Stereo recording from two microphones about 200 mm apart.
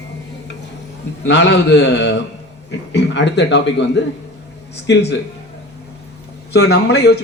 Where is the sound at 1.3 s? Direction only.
60° left (ahead or behind).